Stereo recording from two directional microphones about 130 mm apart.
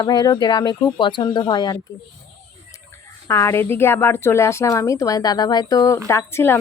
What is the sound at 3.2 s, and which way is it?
A woman's voice, 20° left (ahead or behind).